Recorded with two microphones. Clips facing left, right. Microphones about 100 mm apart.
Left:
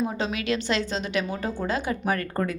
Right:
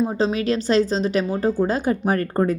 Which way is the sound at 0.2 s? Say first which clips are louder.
Right 6 dB; 35° right (ahead or behind).